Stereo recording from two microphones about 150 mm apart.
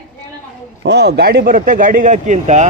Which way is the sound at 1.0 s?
90° right.